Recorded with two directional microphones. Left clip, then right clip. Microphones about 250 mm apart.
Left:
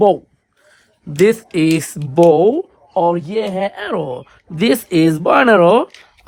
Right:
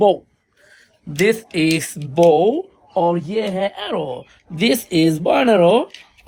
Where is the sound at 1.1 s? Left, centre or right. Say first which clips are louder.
Left 4 dB; left.